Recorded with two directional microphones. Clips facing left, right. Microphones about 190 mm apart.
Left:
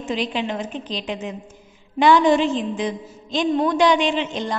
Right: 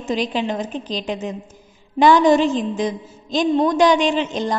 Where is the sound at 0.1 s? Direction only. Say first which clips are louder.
Right 3 dB; 40° right (ahead or behind).